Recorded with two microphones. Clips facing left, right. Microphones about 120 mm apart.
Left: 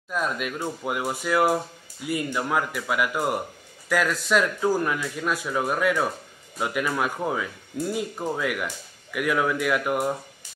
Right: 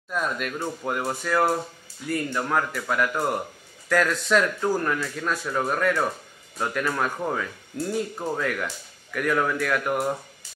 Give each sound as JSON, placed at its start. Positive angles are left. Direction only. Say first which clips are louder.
{"t": 0.1, "sound": "speech", "louder": "even", "side_deg": 5}